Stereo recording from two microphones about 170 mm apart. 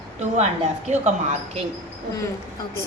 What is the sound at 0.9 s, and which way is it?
Speech, 45° right (ahead or behind).